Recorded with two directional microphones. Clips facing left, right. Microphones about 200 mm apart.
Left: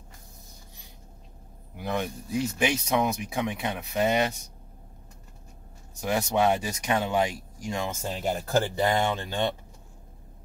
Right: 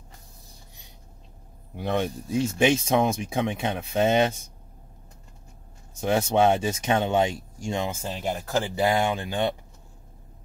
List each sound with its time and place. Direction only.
1.8 s speech: 25° right (ahead or behind)
5.9 s speech: 25° right (ahead or behind)
8.0 s speech: centre (ahead or behind)